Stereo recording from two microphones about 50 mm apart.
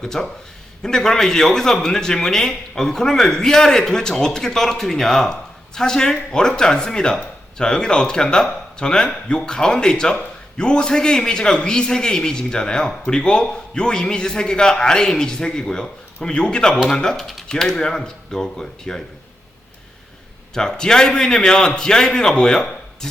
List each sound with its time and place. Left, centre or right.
0.0 s a man's voice: centre
20.5 s a man's voice: centre